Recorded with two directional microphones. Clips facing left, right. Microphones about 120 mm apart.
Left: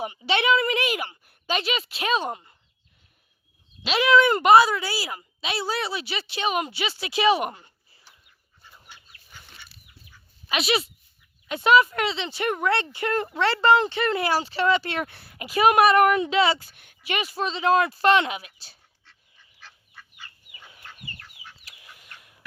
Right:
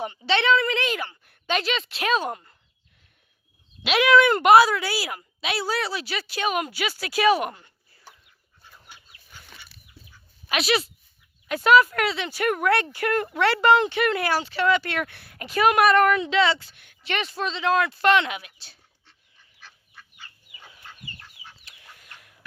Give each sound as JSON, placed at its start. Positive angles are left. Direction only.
{"t": 0.3, "sound": "a woman's voice", "side_deg": 10}
{"t": 3.8, "sound": "speech", "side_deg": 0}
{"t": 8.9, "sound": "dog", "side_deg": -5}
{"t": 10.5, "sound": "speech", "side_deg": 0}
{"t": 13.2, "sound": "speech", "side_deg": 20}
{"t": 15.2, "sound": "a woman's voice", "side_deg": 5}
{"t": 16.6, "sound": "speech", "side_deg": 45}
{"t": 17.0, "sound": "a woman's voice", "side_deg": 10}
{"t": 17.3, "sound": "speech", "side_deg": 35}